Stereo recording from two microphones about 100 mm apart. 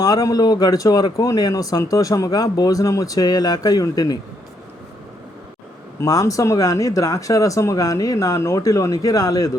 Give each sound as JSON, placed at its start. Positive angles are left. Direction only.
{"t": 0.0, "sound": "speech", "side_deg": 35}
{"t": 6.0, "sound": "speech", "side_deg": 35}